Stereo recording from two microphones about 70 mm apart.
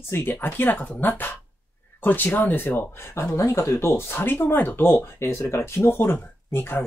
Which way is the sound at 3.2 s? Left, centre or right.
Left.